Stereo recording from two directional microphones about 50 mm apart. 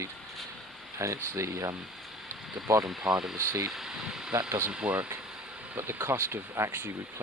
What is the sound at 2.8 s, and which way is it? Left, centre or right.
Speech, centre.